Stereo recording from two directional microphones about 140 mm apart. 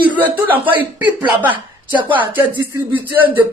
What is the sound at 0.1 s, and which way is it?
A woman's voice, 10° right (ahead or behind).